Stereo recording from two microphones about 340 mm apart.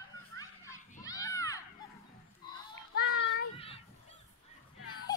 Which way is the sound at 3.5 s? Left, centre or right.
Centre.